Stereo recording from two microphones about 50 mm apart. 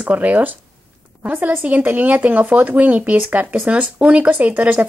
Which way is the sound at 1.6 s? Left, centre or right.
Right.